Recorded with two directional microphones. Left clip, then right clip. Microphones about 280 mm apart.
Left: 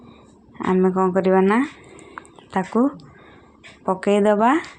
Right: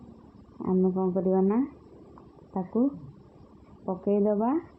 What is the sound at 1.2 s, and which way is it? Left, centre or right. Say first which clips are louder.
A woman's voice: left 8 dB; left.